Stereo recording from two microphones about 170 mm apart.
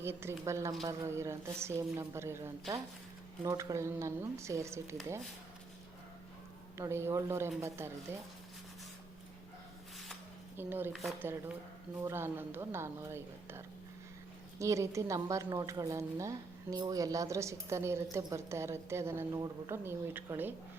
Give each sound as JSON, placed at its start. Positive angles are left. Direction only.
{"t": 0.0, "sound": "a woman's voice", "side_deg": -15}
{"t": 6.7, "sound": "a woman's voice", "side_deg": -15}
{"t": 10.6, "sound": "a woman's voice", "side_deg": -10}
{"t": 14.6, "sound": "a woman's voice", "side_deg": -15}